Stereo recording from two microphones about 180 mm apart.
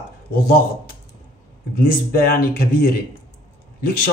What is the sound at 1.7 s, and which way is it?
Speech, 55° left (ahead or behind).